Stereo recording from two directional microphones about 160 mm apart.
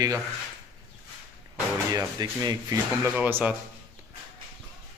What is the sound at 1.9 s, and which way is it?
Speech, 25° right (ahead or behind).